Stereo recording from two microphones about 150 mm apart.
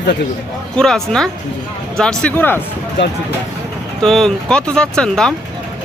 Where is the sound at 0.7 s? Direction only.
5° left (ahead or behind).